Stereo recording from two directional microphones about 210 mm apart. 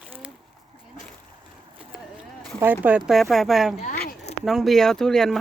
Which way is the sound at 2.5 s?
10° right (ahead or behind).